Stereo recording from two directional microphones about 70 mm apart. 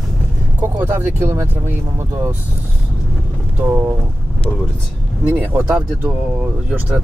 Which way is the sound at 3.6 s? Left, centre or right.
Right.